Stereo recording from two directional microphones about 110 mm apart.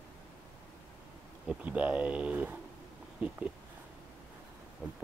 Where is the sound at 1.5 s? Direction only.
15° right (ahead or behind).